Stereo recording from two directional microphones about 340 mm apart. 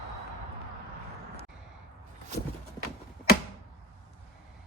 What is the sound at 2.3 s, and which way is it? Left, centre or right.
Horse, centre.